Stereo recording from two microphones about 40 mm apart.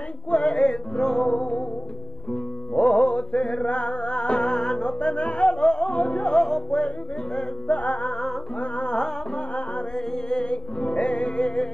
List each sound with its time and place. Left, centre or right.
0.3 s music: left
0.9 s music: centre
1.3 s music: left
2.7 s music: left
6.3 s music: centre
7.7 s music: left
9.9 s music: left